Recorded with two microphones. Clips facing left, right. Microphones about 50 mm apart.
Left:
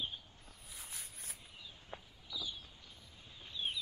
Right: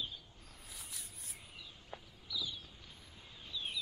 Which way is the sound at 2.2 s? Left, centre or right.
Left.